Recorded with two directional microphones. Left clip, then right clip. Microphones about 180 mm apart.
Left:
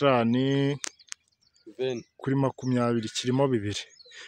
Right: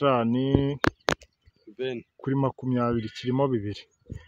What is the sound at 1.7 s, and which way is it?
Speech, 50° left (ahead or behind).